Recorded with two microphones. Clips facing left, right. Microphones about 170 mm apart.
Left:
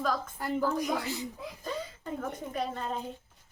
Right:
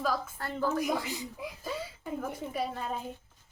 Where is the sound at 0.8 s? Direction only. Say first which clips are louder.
Even; 10° right (ahead or behind).